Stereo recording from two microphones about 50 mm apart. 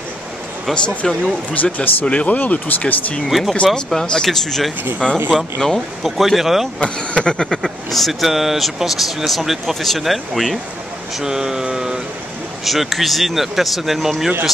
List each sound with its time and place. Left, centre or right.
0.7 s speech: centre
1.5 s speech: left
3.3 s speech: centre
3.7 s speech: centre
6.8 s speech: centre
7.6 s speech: centre
11.1 s a sound: centre
12.6 s speech: centre